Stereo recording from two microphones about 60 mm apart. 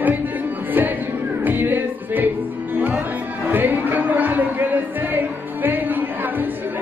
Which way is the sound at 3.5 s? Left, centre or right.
Right.